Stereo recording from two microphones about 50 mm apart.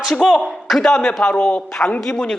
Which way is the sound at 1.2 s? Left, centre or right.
Left.